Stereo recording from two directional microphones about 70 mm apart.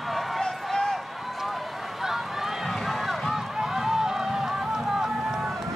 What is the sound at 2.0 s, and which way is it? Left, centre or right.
Run, centre.